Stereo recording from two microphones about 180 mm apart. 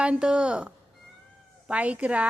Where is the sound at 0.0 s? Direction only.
5° right (ahead or behind).